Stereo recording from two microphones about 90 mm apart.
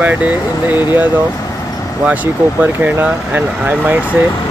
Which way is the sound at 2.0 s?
20° right (ahead or behind).